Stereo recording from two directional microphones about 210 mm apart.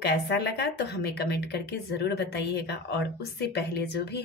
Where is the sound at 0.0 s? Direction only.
50° left (ahead or behind).